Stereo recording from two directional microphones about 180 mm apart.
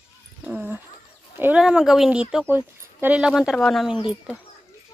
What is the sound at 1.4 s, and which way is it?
Speech, 5° right (ahead or behind).